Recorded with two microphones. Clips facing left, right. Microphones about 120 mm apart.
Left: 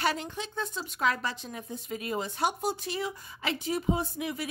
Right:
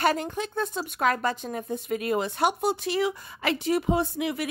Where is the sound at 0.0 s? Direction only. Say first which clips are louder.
Right 6 dB; 50° right (ahead or behind).